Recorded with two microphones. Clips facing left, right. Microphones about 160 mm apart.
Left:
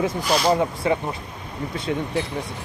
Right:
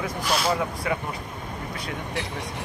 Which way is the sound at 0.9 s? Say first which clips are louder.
Left 6 dB; 30° left (ahead or behind).